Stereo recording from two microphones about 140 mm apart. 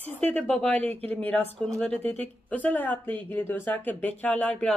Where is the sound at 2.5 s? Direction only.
10° left (ahead or behind).